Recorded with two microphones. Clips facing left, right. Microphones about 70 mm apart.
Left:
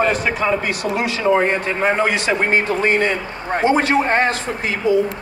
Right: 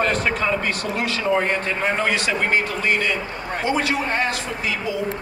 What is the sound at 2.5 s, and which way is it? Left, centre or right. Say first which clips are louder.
A man's voice: left 4 dB; left.